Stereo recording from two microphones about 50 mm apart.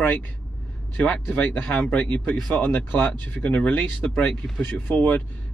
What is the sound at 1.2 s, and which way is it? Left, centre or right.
Speech, left.